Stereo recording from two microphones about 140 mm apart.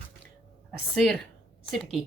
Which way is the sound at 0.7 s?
5° left (ahead or behind).